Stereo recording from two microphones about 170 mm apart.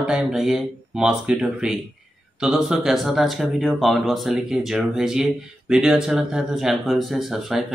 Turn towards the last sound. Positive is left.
turn(degrees=0)  # may be behind; listen again after turning